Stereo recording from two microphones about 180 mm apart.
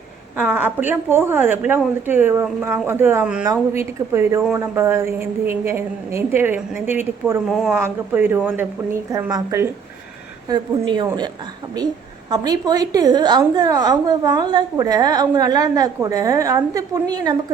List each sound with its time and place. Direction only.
0.3 s a woman's voice: 5° right (ahead or behind); by 11.3 s 25° right (ahead or behind)
12.3 s a woman's voice: 20° right (ahead or behind)